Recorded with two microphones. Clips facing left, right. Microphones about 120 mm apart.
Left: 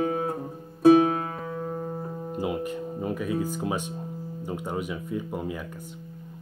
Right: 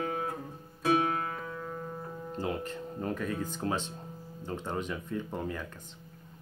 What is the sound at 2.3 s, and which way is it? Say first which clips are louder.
Speech: left 5 dB; 10° left (ahead or behind).